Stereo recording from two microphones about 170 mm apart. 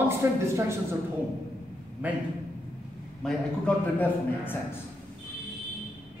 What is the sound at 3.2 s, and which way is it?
A man's voice, 5° left (ahead or behind).